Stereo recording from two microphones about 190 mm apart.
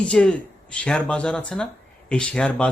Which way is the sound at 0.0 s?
5° left (ahead or behind).